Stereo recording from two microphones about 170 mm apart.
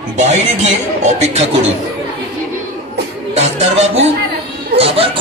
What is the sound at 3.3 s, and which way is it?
Speech, 40° right (ahead or behind).